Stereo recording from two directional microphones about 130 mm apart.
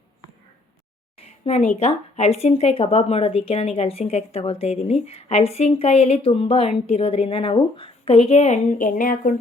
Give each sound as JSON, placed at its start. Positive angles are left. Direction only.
{"t": 1.5, "sound": "speech", "side_deg": 55}